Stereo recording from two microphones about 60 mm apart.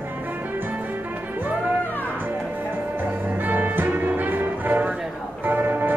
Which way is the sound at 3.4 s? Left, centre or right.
Right.